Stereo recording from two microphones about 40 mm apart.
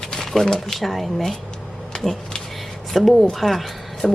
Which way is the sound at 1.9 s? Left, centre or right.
Centre.